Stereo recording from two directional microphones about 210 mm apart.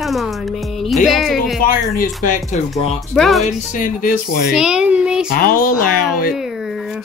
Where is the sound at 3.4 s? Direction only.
40° left (ahead or behind).